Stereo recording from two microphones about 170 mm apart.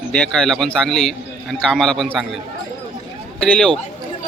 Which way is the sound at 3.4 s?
5° left (ahead or behind).